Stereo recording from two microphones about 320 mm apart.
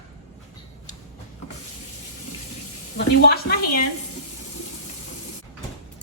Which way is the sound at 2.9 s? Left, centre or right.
Left.